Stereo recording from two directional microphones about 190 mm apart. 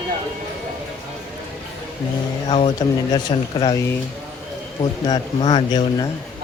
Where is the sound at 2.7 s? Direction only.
25° left (ahead or behind).